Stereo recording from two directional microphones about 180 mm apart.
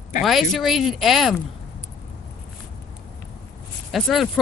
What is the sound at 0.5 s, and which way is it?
Speech, centre (ahead or behind).